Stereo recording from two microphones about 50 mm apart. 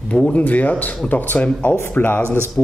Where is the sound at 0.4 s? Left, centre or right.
Left.